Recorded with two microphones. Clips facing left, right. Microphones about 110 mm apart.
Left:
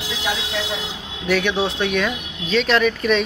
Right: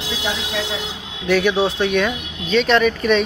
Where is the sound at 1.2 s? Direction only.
Centre (ahead or behind).